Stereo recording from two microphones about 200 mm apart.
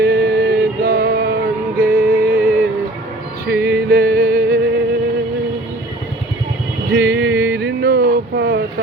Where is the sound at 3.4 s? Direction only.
50° right (ahead or behind).